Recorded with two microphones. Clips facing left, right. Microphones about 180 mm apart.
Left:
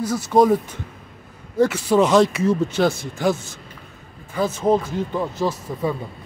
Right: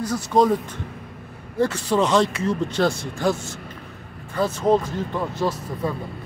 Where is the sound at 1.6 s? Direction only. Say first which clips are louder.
Left 4 dB; 10° left (ahead or behind).